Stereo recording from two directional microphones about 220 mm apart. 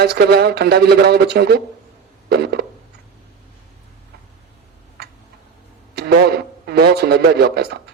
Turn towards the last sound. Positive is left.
turn(degrees=-50)  # may be behind; listen again after turning